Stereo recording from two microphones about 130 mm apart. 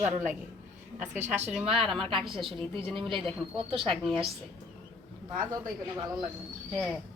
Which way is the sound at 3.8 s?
Centre (ahead or behind).